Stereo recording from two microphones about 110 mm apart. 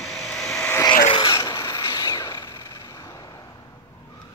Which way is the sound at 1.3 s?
35° left (ahead or behind).